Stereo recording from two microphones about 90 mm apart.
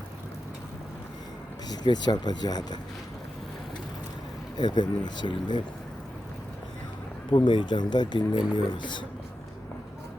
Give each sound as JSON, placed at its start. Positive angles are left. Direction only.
{"t": 1.7, "sound": "speech", "side_deg": 50}
{"t": 4.5, "sound": "speech", "side_deg": 55}
{"t": 7.3, "sound": "speech", "side_deg": 65}